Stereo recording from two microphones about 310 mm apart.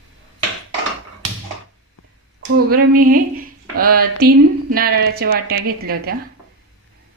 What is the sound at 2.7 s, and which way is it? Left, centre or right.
Speech, right.